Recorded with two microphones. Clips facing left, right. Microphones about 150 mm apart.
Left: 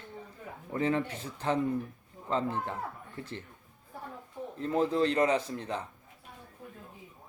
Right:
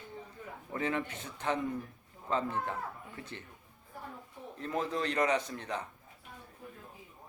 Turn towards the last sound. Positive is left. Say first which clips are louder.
# left 2 dB
turn(degrees=30)  # may be behind; listen again after turning